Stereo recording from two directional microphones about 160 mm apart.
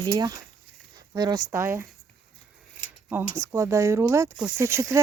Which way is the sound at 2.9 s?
10° right (ahead or behind).